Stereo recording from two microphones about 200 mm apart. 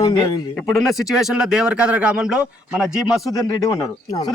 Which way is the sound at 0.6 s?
Centre (ahead or behind).